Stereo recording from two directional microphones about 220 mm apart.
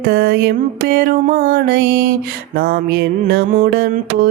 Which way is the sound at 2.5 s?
45° right (ahead or behind).